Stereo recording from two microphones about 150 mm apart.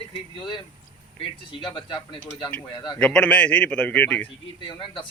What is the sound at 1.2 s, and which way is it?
Speech, 30° left (ahead or behind).